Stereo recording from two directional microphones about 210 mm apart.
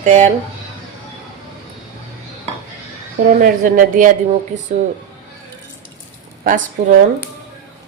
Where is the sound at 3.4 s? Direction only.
40° right (ahead or behind).